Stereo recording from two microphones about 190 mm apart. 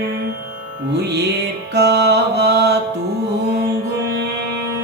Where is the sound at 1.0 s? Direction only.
60° right (ahead or behind).